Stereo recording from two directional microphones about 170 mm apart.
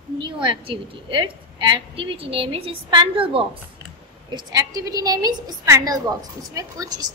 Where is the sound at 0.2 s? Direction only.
30° right (ahead or behind).